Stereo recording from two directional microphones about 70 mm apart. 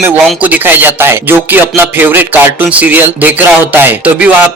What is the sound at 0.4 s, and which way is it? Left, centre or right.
Speech, right.